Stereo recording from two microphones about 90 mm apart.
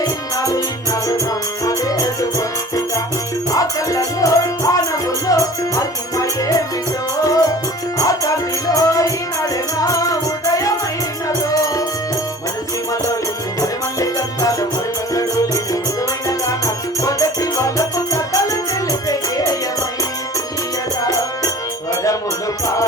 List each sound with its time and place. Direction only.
0.0 s music: 40° left (ahead or behind)
3.5 s music: 40° left (ahead or behind)
13.6 s music: 40° left (ahead or behind)
21.0 s music: 40° left (ahead or behind)